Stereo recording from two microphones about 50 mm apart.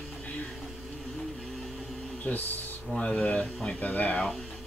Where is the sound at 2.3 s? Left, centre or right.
Left.